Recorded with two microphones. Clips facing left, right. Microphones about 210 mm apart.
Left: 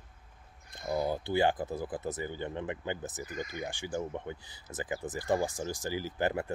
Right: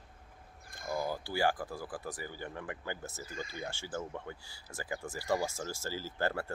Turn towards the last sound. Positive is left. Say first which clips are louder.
# left 3 dB
turn(degrees=15)  # may be behind; listen again after turning